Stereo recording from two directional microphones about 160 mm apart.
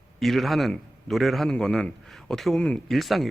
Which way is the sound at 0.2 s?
Centre (ahead or behind).